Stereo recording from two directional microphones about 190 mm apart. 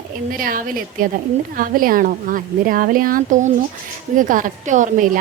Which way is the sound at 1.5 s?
50° right (ahead or behind).